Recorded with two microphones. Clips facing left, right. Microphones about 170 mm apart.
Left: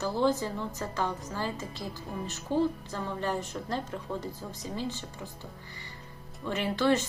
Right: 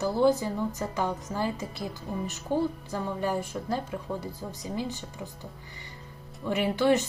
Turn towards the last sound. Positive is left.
turn(degrees=-15)  # may be behind; listen again after turning